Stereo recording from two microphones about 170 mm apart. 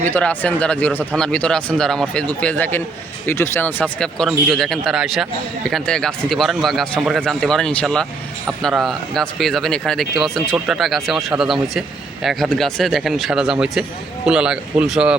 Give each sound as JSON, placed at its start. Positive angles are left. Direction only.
{"t": 0.1, "sound": "speech", "side_deg": 10}